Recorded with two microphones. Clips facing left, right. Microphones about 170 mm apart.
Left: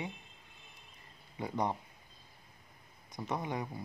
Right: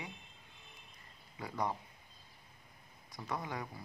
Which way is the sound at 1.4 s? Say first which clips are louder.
Left 3 dB; 20° left (ahead or behind).